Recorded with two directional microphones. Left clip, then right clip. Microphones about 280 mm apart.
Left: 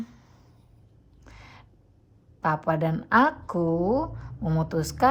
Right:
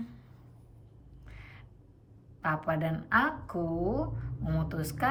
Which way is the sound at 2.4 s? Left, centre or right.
Centre.